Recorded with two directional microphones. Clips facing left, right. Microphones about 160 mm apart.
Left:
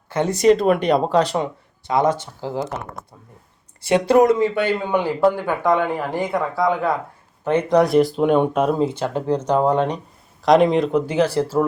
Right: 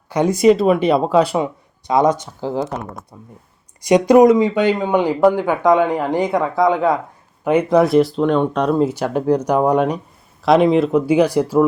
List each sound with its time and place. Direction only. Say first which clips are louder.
0.1 s speech: right 3 dB; 10° right (ahead or behind)
1.9 s speech: right 3 dB; 20° right (ahead or behind)
3.8 s speech: right 4 dB; 15° right (ahead or behind)
7.4 s speech: right 3 dB; 10° right (ahead or behind)
8.9 s speech: right 4 dB; 15° right (ahead or behind)